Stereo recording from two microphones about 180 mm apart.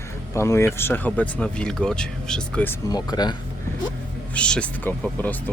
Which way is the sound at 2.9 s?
25° left (ahead or behind).